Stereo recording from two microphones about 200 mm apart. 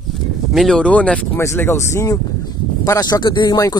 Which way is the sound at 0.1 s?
Centre (ahead or behind).